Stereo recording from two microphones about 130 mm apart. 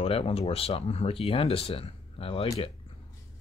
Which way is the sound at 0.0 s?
45° left (ahead or behind).